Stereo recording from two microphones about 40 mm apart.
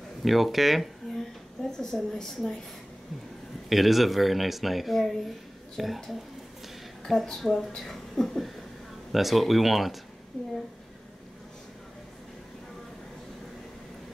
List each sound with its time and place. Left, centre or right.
0.2 s speech: centre
1.1 s a sound: centre
1.7 s a woman's voice: centre
3.6 s speech: centre
7.1 s a woman's voice: centre
10.3 s a woman's voice: centre